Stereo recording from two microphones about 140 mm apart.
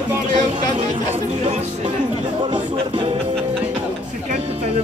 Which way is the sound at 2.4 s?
35° right (ahead or behind).